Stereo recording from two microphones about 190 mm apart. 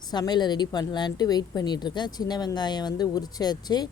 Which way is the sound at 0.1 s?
20° left (ahead or behind).